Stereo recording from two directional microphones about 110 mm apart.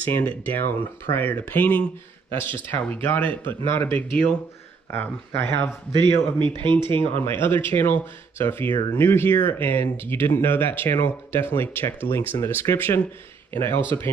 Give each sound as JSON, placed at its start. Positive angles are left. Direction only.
{"t": 0.0, "sound": "speech", "side_deg": 15}
{"t": 5.9, "sound": "speech", "side_deg": -45}
{"t": 7.0, "sound": "speech", "side_deg": 20}